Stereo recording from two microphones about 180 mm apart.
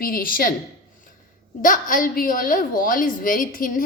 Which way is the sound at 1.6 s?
50° left (ahead or behind).